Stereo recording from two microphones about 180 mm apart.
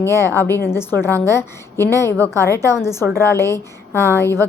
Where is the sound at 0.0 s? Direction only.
15° left (ahead or behind).